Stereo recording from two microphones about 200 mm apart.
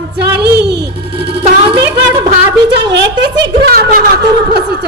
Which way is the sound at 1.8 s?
20° right (ahead or behind).